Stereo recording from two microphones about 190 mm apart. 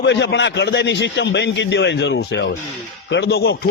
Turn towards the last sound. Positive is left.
turn(degrees=55)  # may be behind; listen again after turning